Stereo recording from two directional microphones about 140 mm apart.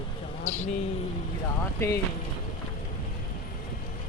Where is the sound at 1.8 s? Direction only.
20° left (ahead or behind).